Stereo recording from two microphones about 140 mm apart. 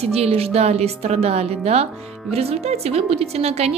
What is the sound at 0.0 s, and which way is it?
A woman's voice, 45° right (ahead or behind).